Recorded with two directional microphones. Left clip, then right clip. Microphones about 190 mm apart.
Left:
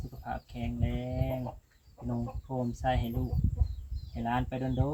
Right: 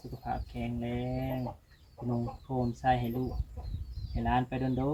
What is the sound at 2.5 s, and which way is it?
Speech, 20° left (ahead or behind).